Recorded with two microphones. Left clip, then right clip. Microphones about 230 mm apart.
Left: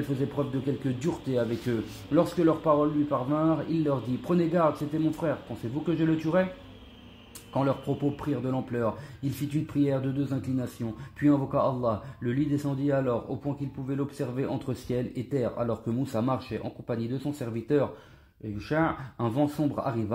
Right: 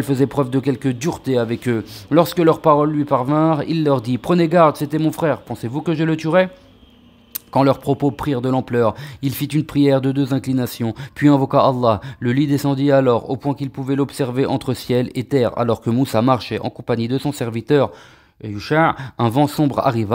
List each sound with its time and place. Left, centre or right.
0.2 s speech: right
7.5 s speech: right